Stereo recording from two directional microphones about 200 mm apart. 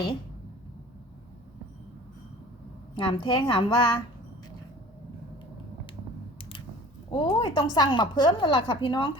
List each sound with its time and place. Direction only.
2.9 s a woman's voice: 25° left (ahead or behind)
7.1 s a woman's voice: 25° left (ahead or behind)